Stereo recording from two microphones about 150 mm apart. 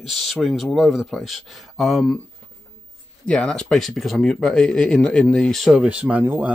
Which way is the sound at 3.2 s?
5° left (ahead or behind).